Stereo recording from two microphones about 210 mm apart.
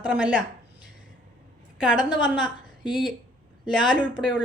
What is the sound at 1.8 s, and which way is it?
A woman's voice, 5° right (ahead or behind).